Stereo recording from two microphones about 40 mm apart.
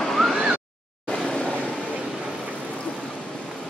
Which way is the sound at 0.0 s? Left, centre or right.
Centre.